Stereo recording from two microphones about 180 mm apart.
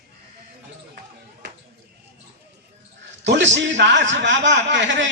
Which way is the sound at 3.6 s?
80° right.